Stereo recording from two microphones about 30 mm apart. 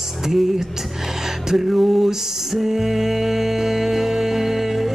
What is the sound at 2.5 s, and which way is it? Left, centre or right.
Music, centre.